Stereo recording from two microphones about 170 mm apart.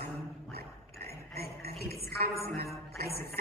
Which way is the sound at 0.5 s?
65° right (ahead or behind).